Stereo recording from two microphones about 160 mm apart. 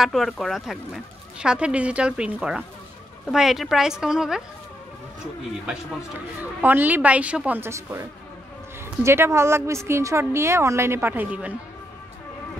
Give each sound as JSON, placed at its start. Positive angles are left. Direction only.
{"t": 0.0, "sound": "speech", "side_deg": 0}
{"t": 5.7, "sound": "a woman's voice", "side_deg": -5}
{"t": 9.0, "sound": "a woman's voice", "side_deg": -15}